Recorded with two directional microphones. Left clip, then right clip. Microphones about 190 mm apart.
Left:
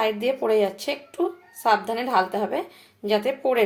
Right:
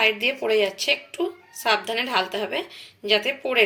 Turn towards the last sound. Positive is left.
turn(degrees=20)  # may be behind; listen again after turning